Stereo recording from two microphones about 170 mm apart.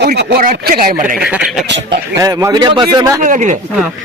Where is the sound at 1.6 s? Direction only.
90° right.